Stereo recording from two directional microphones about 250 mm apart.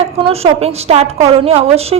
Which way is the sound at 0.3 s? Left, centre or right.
Right.